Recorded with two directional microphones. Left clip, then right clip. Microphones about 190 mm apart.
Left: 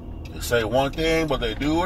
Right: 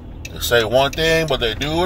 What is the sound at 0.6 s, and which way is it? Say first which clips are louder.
Speech: right 6 dB; 20° right (ahead or behind).